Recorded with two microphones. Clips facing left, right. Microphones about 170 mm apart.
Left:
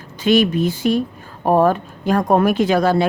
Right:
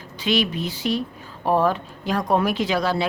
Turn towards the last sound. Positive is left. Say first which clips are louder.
# left 7 dB
turn(degrees=50)  # may be behind; listen again after turning